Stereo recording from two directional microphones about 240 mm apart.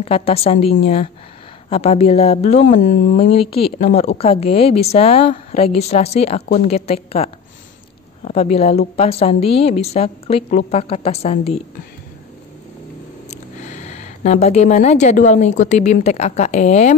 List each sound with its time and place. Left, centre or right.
0.0 s speech: left
1.7 s speech: left
13.3 s a woman's voice: left